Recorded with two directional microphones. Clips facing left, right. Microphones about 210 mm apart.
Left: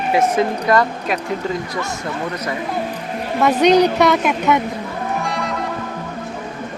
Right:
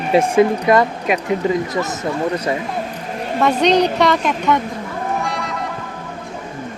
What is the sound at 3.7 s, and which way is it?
Speech, 5° left (ahead or behind).